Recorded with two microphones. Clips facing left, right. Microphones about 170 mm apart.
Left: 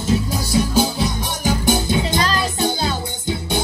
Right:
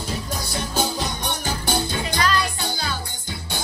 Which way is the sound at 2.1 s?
25° left (ahead or behind).